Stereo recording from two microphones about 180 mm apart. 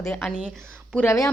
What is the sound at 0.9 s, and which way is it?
Speech, 15° left (ahead or behind).